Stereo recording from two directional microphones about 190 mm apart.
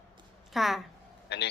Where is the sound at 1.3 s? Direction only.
60° left (ahead or behind).